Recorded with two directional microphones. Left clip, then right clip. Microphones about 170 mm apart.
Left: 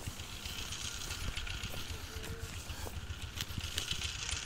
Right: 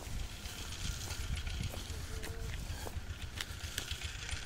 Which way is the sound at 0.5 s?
75° right (ahead or behind).